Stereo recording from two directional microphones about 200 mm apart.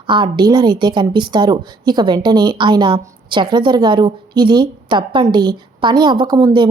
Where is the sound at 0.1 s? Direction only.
25° right (ahead or behind).